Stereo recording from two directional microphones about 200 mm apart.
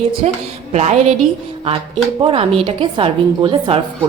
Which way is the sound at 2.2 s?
30° right (ahead or behind).